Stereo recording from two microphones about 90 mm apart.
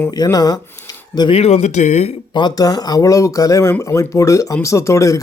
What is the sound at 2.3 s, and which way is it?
Speech, 50° left (ahead or behind).